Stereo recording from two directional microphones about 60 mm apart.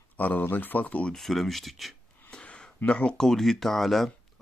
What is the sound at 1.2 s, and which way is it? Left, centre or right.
Speech, centre.